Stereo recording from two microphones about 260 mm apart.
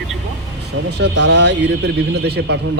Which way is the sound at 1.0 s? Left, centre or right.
Right.